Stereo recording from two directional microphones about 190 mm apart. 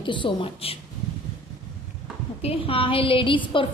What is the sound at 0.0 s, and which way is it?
Speech, 25° left (ahead or behind).